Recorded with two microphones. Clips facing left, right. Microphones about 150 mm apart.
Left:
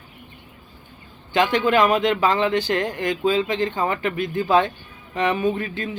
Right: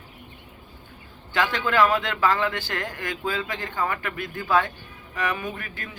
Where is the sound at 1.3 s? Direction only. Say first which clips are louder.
Left 6 dB; 20° left (ahead or behind).